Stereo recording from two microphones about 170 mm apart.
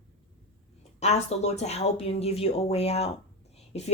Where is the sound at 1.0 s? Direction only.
40° left (ahead or behind).